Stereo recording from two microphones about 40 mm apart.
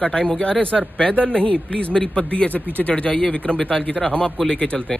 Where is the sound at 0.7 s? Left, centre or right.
Centre.